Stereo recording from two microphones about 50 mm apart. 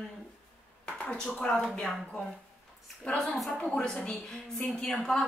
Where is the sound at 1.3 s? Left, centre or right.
Centre.